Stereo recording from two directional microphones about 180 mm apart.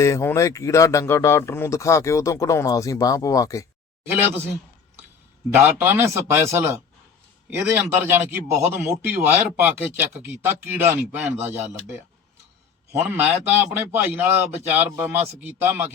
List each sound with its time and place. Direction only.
0.0 s speech: 15° left (ahead or behind)
5.5 s speech: 10° right (ahead or behind)